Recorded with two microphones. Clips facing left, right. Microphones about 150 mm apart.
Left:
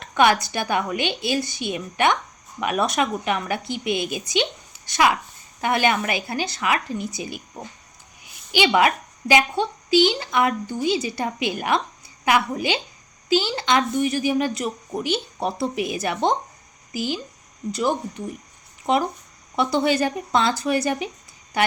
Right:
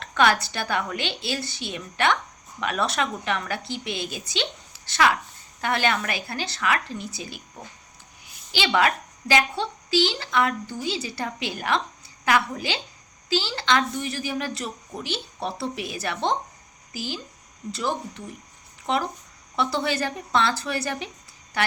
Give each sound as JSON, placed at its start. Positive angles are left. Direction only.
{"t": 0.0, "sound": "a woman's voice", "side_deg": 15}
{"t": 8.5, "sound": "a woman's voice", "side_deg": 15}
{"t": 19.5, "sound": "a woman's voice", "side_deg": 15}